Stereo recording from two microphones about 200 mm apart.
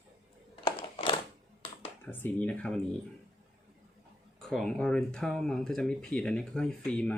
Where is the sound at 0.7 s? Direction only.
25° left (ahead or behind).